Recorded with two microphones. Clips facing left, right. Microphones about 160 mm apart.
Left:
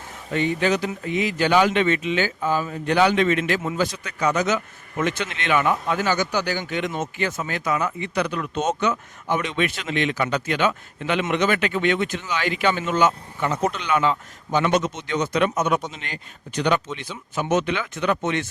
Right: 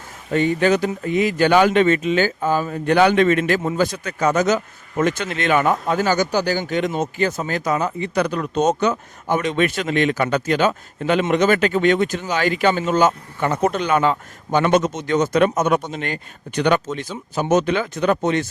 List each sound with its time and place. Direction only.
0.3 s speech: 45° right (ahead or behind)
3.6 s speech: 35° right (ahead or behind)
3.8 s speech: 50° right (ahead or behind)